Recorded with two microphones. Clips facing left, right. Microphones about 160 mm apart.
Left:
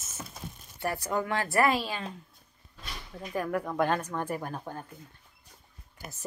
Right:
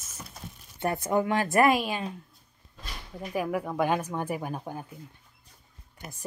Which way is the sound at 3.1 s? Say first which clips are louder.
Right 2 dB; 10° right (ahead or behind).